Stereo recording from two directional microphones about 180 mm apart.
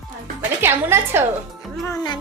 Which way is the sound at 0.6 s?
10° right (ahead or behind).